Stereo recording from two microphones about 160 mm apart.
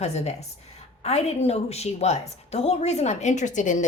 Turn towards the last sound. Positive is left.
turn(degrees=50)  # may be behind; listen again after turning